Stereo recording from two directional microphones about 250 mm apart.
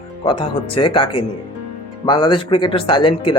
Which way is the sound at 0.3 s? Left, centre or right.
Left.